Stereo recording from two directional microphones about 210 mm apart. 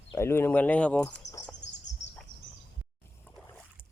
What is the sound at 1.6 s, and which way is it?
Bird, 60° left (ahead or behind).